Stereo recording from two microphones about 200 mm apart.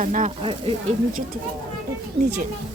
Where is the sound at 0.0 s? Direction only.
40° right (ahead or behind).